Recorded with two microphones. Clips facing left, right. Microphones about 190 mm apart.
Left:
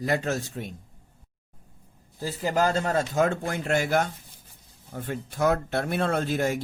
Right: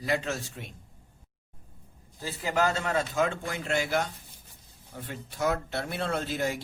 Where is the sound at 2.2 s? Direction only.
40° left (ahead or behind).